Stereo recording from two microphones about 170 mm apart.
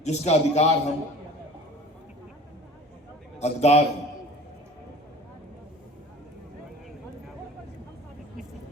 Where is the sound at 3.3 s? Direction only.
40° left (ahead or behind).